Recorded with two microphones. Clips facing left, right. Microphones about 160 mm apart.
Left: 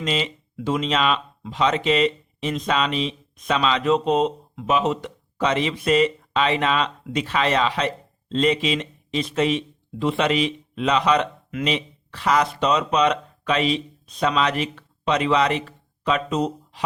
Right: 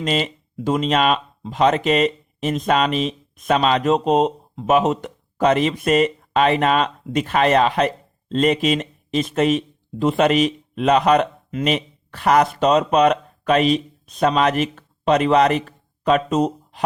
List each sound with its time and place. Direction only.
0.0 s speech: 50° right (ahead or behind)